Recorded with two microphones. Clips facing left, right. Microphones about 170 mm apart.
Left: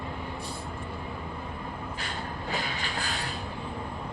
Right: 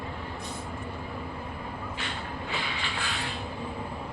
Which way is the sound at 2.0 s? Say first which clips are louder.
Even; 40° left (ahead or behind).